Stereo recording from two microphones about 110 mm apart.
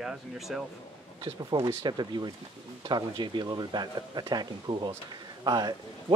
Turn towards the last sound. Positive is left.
turn(degrees=-40)  # may be behind; listen again after turning